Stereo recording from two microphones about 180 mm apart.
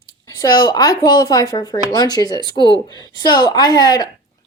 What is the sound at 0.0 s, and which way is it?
A woman's voice, 20° left (ahead or behind).